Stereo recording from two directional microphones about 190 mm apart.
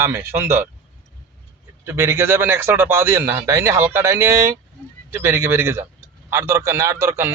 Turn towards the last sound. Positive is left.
turn(degrees=-15)  # may be behind; listen again after turning